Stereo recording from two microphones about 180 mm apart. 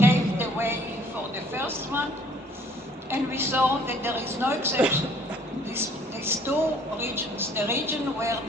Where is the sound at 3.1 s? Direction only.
15° right (ahead or behind).